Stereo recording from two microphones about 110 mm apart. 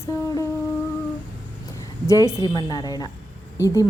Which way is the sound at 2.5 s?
35° left (ahead or behind).